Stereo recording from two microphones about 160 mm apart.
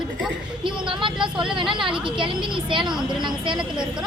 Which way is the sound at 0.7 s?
30° right (ahead or behind).